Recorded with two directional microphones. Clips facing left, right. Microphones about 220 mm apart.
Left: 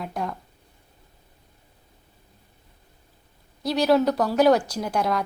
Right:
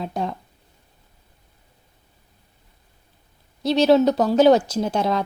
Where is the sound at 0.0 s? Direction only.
25° right (ahead or behind).